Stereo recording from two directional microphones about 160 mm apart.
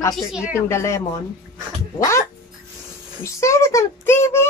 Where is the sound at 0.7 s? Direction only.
15° left (ahead or behind).